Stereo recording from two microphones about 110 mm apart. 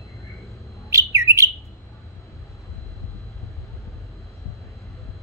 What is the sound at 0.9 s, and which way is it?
Bird, 25° right (ahead or behind).